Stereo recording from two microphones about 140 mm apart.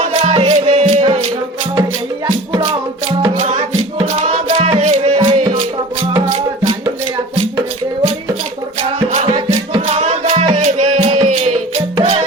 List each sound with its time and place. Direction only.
0.0 s music: 50° right (ahead or behind)
2.2 s music: 35° right (ahead or behind)
3.3 s music: 60° right (ahead or behind)
9.1 s music: 50° right (ahead or behind)